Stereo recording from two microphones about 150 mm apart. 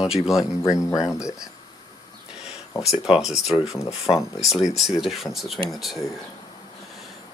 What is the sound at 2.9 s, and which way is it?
Speech, 5° right (ahead or behind).